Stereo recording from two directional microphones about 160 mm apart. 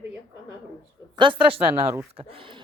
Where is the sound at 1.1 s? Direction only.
30° right (ahead or behind).